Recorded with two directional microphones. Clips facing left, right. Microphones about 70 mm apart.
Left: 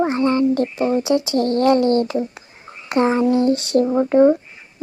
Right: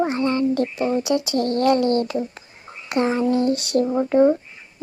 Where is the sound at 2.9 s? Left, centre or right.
Left.